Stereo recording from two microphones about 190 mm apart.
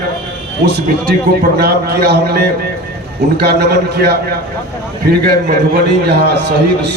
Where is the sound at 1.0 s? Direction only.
55° right (ahead or behind).